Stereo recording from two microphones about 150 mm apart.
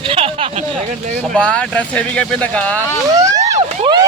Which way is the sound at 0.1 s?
40° right (ahead or behind).